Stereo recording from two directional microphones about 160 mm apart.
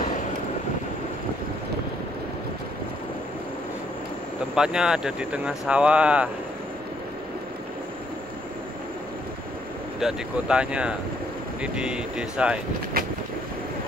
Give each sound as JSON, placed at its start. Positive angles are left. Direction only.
{"t": 4.6, "sound": "speech", "side_deg": -5}
{"t": 9.9, "sound": "speech", "side_deg": -5}
{"t": 13.0, "sound": "vehicle", "side_deg": -65}